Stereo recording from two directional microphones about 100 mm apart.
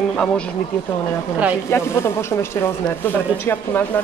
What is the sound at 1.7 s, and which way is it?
Speech, 25° left (ahead or behind).